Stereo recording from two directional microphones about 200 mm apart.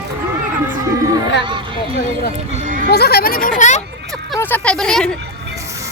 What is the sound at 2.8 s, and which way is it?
Speech, 50° left (ahead or behind).